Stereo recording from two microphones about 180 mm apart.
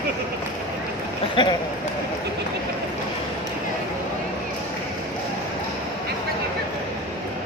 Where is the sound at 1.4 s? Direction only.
25° left (ahead or behind).